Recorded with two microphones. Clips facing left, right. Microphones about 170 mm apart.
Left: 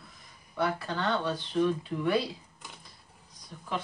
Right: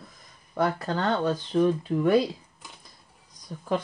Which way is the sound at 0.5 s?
45° right (ahead or behind).